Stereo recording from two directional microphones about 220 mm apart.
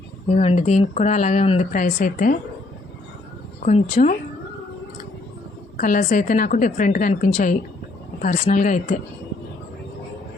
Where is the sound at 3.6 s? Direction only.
35° left (ahead or behind).